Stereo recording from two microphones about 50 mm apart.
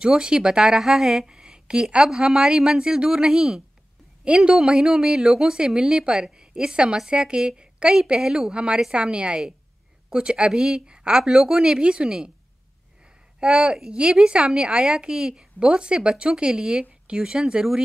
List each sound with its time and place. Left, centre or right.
0.1 s a woman's voice: centre
13.4 s a woman's voice: centre